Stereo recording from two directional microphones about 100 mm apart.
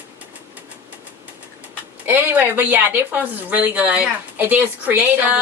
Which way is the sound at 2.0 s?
20° right (ahead or behind).